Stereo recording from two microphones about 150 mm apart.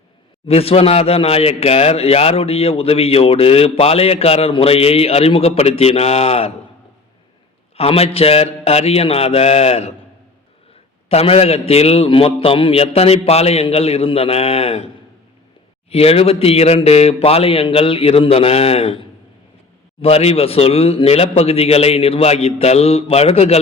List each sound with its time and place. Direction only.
0.4 s speech: 40° left (ahead or behind)
7.8 s speech: 40° left (ahead or behind)
11.1 s speech: 45° left (ahead or behind)
15.9 s speech: 40° left (ahead or behind)